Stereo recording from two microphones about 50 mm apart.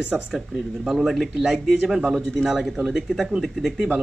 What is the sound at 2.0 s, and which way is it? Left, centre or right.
Speech, centre.